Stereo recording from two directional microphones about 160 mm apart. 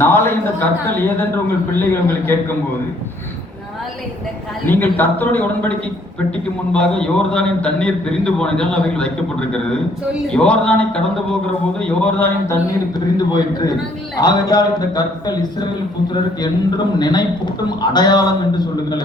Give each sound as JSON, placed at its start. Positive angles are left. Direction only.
{"t": 0.0, "sound": "a sound", "side_deg": 15}
{"t": 1.9, "sound": "speech", "side_deg": 15}
{"t": 4.6, "sound": "speech", "side_deg": 10}
{"t": 6.7, "sound": "a man's voice", "side_deg": 5}
{"t": 13.1, "sound": "a man's voice", "side_deg": 25}